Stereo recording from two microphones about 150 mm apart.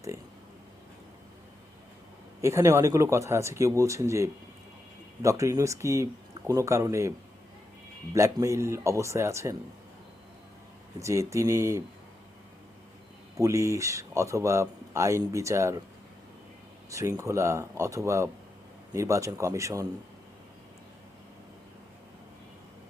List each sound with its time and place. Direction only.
2.4 s speech: 20° right (ahead or behind)
8.1 s speech: 20° right (ahead or behind)
11.0 s speech: 20° right (ahead or behind)
13.3 s speech: 20° right (ahead or behind)
16.9 s speech: 20° right (ahead or behind)